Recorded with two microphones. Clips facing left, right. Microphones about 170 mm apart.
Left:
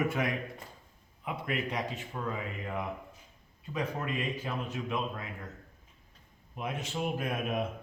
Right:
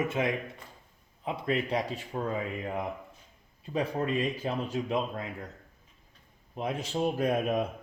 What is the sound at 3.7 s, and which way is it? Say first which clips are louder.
Speech: right 5 dB; 30° right (ahead or behind).